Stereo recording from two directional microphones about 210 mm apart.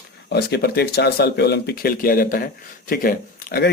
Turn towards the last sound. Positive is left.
turn(degrees=45)  # may be behind; listen again after turning